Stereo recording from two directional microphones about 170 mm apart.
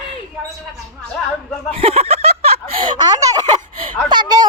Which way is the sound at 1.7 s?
35° right (ahead or behind).